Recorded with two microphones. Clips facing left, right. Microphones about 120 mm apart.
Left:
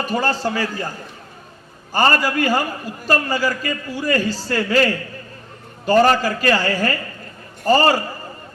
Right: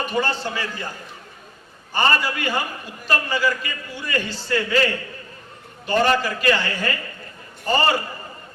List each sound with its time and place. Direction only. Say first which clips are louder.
0.0 s a man's voice: left 3 dB; 40° left (ahead or behind)
1.9 s a man's voice: left 4 dB; 40° left (ahead or behind)